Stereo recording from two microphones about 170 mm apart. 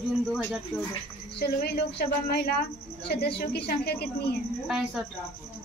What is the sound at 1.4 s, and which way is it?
A woman's voice, 70° left (ahead or behind).